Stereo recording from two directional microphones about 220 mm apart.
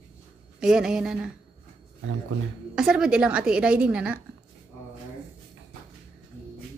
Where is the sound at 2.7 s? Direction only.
5° right (ahead or behind).